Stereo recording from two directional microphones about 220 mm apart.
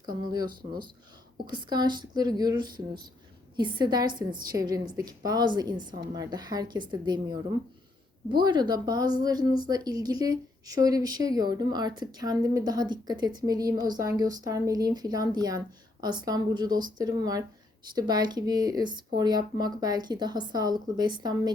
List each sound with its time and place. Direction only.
0.0 s speech: 20° right (ahead or behind)
1.5 s a woman's voice: 20° right (ahead or behind)